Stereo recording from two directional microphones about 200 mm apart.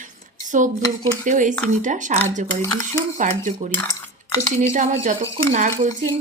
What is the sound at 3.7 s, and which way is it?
Cutlery, 15° left (ahead or behind).